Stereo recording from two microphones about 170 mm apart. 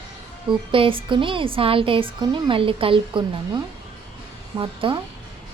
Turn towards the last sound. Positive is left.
turn(degrees=-30)  # may be behind; listen again after turning